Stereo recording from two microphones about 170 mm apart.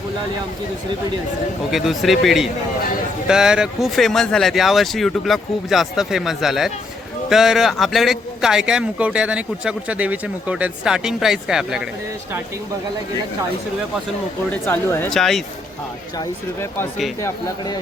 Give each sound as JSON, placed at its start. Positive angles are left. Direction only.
{"t": 1.7, "sound": "a man's voice", "side_deg": 0}
{"t": 14.7, "sound": "speech", "side_deg": 15}
{"t": 15.1, "sound": "a man's voice", "side_deg": 0}
{"t": 16.1, "sound": "speech", "side_deg": 15}